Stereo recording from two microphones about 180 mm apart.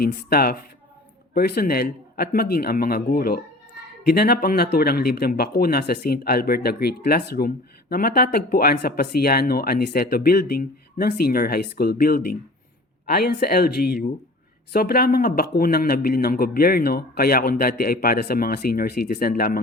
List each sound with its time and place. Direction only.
0.0 s speech: 55° left (ahead or behind)